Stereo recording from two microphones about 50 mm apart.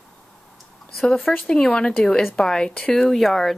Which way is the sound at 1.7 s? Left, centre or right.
Centre.